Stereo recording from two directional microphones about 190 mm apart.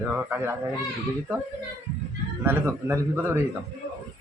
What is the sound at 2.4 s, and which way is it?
Speech, 15° right (ahead or behind).